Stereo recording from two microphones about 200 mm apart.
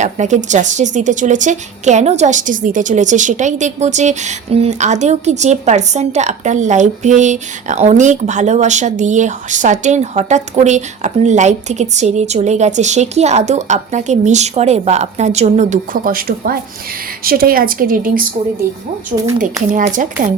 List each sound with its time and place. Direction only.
0.0 s a woman's voice: 35° right (ahead or behind)
19.7 s a woman's voice: 40° right (ahead or behind)